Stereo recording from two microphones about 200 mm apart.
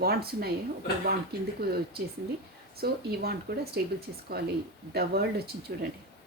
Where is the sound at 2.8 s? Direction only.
50° right (ahead or behind).